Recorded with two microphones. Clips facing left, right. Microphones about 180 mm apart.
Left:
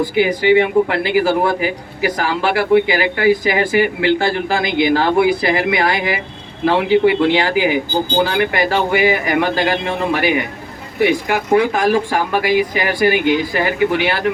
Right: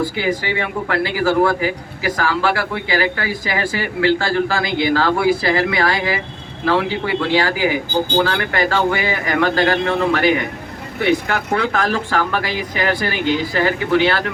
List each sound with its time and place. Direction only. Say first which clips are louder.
0.0 s speech: left 5 dB; 20° left (ahead or behind)